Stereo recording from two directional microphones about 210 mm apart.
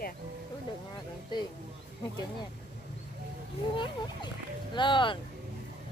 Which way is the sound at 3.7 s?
20° left (ahead or behind).